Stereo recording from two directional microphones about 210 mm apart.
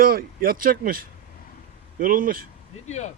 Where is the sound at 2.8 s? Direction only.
35° left (ahead or behind).